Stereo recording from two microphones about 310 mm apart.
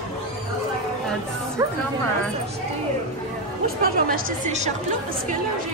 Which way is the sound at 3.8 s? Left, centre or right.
Right.